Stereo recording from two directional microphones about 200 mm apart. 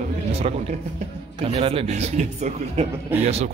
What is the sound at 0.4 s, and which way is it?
Speech, 30° right (ahead or behind).